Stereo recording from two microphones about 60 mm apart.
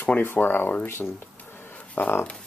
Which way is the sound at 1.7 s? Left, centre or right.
Left.